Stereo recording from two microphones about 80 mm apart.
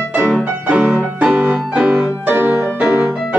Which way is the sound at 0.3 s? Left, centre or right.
Centre.